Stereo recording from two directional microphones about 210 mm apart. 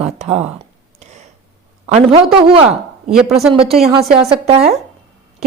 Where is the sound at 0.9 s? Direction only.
30° right (ahead or behind).